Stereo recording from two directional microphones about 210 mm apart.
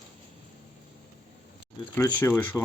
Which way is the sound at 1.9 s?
10° left (ahead or behind).